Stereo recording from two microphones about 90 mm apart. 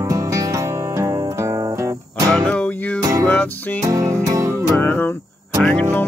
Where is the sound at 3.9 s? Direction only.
40° right (ahead or behind).